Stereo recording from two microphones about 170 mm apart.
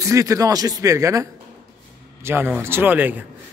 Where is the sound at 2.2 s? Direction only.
10° right (ahead or behind).